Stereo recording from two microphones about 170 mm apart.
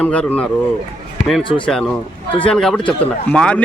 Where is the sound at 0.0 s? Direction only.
5° left (ahead or behind).